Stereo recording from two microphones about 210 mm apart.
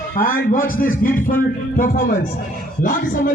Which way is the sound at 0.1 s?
40° left (ahead or behind).